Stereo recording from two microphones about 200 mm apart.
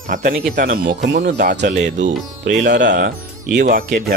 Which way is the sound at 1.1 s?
60° right (ahead or behind).